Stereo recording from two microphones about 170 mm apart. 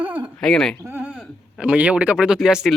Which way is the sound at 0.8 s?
10° right (ahead or behind).